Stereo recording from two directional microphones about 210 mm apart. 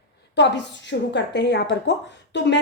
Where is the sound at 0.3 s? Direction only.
55° left (ahead or behind).